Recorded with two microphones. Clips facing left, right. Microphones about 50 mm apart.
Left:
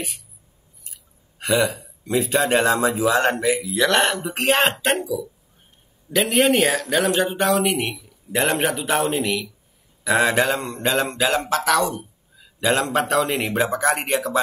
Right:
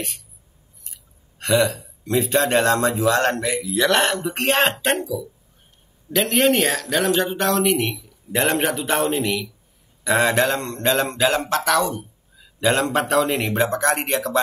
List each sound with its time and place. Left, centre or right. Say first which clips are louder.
1.4 s mantra: right 1 dB; centre